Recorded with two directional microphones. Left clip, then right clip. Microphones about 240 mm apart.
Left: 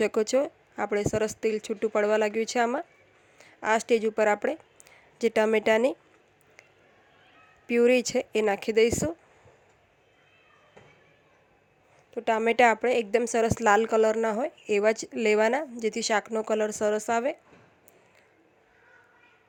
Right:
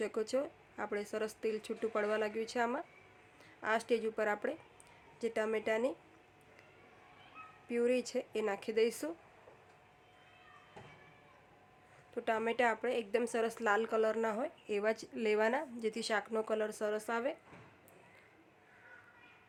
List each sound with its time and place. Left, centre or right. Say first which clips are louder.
0.0 s speech: left 11 dB; left
7.7 s speech: left 12 dB; left
12.1 s a woman's voice: left 10 dB; left